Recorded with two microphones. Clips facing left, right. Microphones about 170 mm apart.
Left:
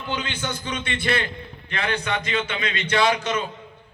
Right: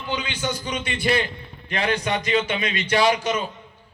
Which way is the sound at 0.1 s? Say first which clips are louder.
Right 2 dB; 15° right (ahead or behind).